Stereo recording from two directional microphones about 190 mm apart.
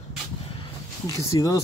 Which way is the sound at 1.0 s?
20° left (ahead or behind).